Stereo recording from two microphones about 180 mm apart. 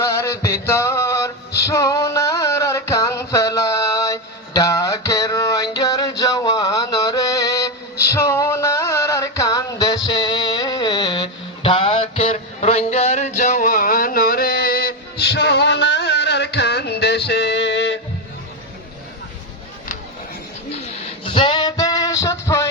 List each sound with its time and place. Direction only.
0.0 s music: 15° left (ahead or behind); by 17.9 s 75° left (ahead or behind)
21.3 s music: 25° left (ahead or behind)